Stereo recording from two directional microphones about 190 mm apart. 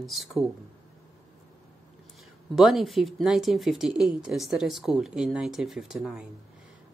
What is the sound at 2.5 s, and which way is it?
Speech, centre (ahead or behind).